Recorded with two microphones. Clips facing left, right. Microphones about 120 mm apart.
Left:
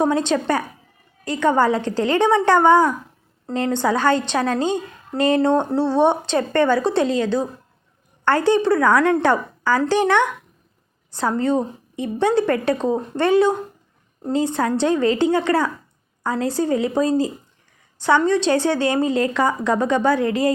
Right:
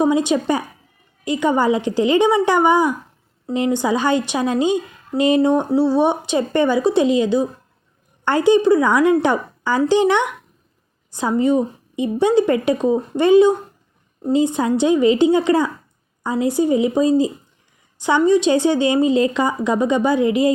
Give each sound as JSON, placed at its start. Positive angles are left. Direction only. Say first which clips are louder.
{"t": 0.0, "sound": "a woman's voice", "louder": "right 2 dB", "side_deg": -10}